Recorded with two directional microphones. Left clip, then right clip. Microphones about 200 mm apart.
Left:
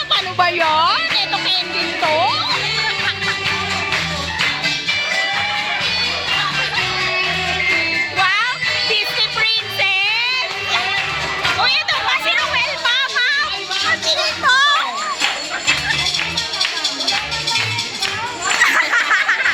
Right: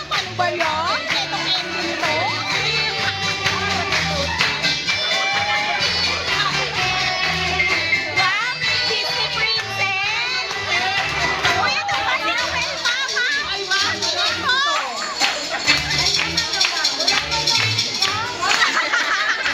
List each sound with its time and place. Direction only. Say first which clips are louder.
0.3 s music: left 6 dB; 30° left (ahead or behind)
12.1 s music: left 4 dB; 45° left (ahead or behind)
14.4 s children playing: left 8 dB; 45° left (ahead or behind)
18.6 s a sound: left 4 dB; 40° left (ahead or behind)